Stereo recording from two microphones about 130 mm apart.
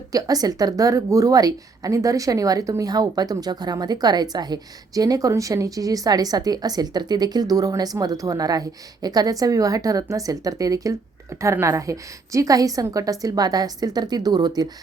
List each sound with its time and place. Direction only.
0.1 s speech: 30° right (ahead or behind)